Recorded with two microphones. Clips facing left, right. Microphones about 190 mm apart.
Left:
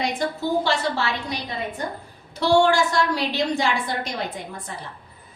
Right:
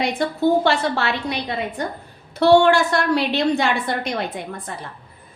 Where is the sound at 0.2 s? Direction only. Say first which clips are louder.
Right 8 dB; 60° right (ahead or behind).